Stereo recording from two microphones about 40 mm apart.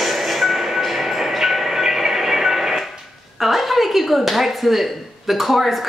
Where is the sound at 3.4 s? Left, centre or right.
Centre.